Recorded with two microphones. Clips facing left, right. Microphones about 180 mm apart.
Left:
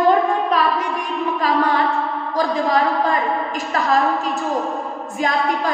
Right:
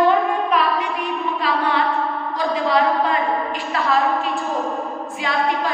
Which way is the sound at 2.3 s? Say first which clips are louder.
Left 2 dB; 45° left (ahead or behind).